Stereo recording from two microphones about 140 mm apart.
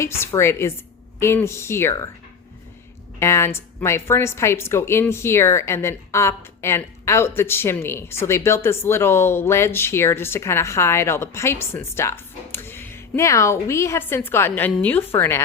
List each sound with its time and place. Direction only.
0.0 s speech: 20° left (ahead or behind)
3.2 s a woman's voice: 20° left (ahead or behind)